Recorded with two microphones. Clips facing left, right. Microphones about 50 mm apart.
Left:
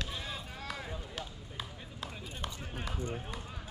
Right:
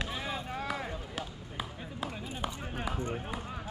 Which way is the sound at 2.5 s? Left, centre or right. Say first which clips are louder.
Right 5 dB; right.